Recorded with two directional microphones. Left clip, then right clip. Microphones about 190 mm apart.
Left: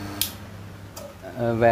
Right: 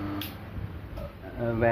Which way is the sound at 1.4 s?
90° left.